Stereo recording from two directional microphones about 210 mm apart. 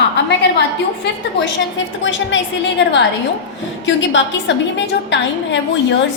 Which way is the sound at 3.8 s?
60° left (ahead or behind).